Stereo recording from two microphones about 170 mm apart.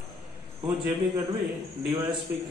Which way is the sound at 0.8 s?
30° right (ahead or behind).